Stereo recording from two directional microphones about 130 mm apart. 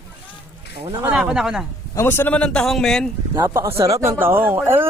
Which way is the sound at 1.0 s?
5° right (ahead or behind).